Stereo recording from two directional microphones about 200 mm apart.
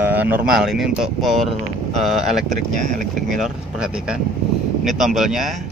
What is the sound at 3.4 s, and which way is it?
Speech, 5° right (ahead or behind).